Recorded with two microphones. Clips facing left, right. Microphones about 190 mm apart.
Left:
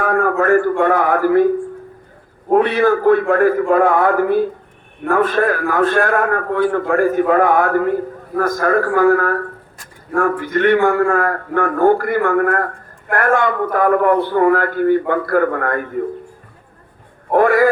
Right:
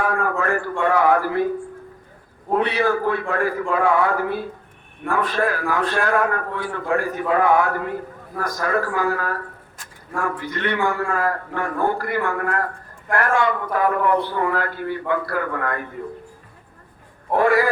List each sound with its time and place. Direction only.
0.0 s a man's voice: 50° left (ahead or behind)
2.5 s a man's voice: 50° left (ahead or behind)
17.3 s a sound: 50° left (ahead or behind)